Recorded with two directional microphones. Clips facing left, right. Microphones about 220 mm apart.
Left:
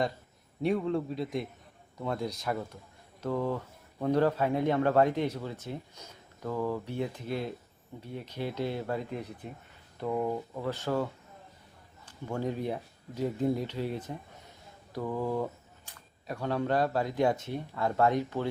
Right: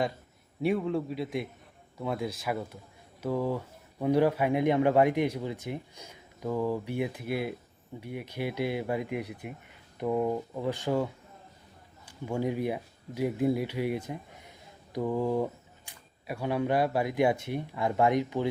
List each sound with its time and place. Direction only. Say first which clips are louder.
0.6 s a man's voice: right 1 dB; 5° right (ahead or behind)